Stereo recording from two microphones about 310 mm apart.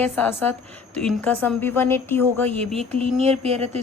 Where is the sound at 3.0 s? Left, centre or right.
Centre.